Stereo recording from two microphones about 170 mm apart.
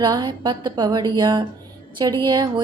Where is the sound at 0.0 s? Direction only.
25° right (ahead or behind).